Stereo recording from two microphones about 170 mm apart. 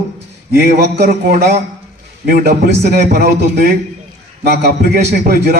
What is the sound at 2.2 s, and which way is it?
A man's voice, 65° right (ahead or behind).